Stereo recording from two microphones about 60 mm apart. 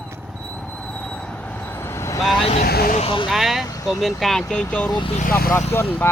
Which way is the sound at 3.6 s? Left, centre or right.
Left.